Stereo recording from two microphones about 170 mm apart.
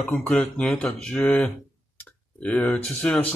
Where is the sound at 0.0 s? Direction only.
5° left (ahead or behind).